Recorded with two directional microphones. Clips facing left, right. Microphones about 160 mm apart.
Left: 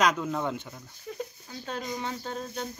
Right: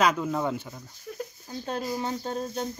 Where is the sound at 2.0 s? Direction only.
30° right (ahead or behind).